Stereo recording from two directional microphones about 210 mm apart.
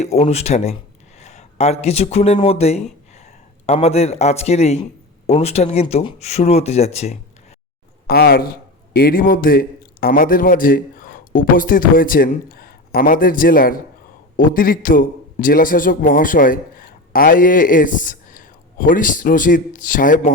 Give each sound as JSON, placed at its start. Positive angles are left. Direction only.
{"t": 0.0, "sound": "speech", "side_deg": 30}
{"t": 8.0, "sound": "a man's voice", "side_deg": 50}